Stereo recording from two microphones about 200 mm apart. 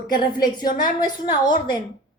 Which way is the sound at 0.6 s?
40° left (ahead or behind).